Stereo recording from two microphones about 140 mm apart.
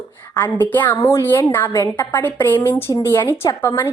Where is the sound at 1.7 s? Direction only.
25° left (ahead or behind).